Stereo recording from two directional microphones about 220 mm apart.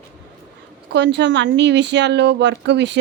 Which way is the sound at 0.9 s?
55° right (ahead or behind).